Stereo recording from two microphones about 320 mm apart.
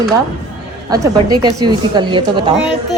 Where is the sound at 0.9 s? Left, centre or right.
Centre.